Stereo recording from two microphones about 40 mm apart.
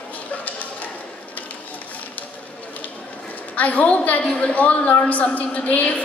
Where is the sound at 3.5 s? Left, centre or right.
Left.